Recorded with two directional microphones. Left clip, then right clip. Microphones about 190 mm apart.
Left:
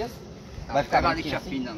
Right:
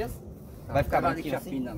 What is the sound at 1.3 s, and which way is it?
Speech, 65° right (ahead or behind).